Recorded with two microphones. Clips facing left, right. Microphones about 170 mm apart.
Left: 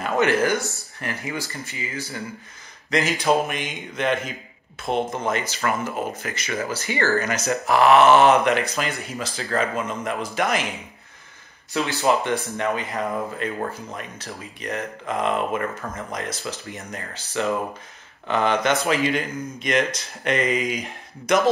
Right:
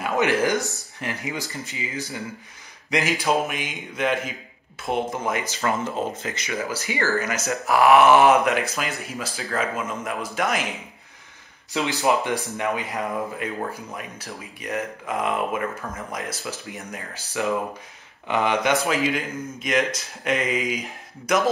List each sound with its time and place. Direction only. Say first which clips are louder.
0.0 s speech: left 1 dB; 15° right (ahead or behind)
11.7 s speech: left 1 dB; 15° right (ahead or behind)